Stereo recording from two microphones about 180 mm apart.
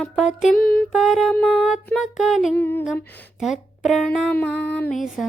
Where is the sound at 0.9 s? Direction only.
Centre (ahead or behind).